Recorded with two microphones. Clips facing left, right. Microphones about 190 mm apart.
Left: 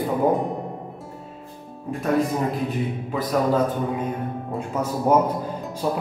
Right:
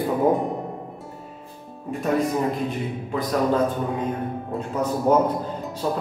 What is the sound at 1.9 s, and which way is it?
A man's voice, centre (ahead or behind).